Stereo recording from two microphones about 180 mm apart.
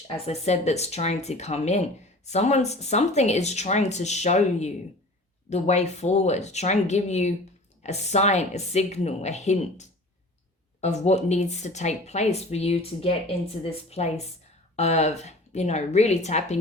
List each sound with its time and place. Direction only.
0.3 s speech: 40° left (ahead or behind)